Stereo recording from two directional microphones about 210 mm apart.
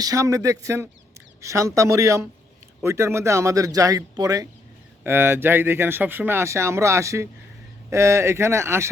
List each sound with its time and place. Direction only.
0.0 s speech: 15° right (ahead or behind)